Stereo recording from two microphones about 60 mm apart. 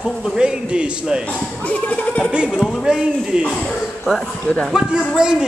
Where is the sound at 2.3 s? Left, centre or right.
Centre.